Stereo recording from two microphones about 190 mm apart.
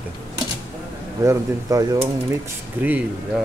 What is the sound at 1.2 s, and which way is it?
Speech, 20° right (ahead or behind).